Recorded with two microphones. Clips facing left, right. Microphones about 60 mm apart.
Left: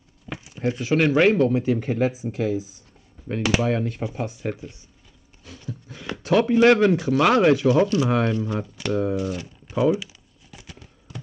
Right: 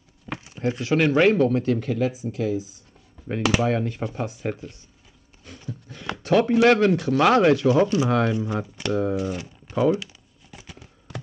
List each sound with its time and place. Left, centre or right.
0.3 s speech: centre
1.9 s speech: left
3.3 s speech: centre
4.6 s speech: centre
5.7 s a sound: centre
6.6 s speech: centre
7.6 s speech: right
8.2 s speech: centre
10.5 s a sound: centre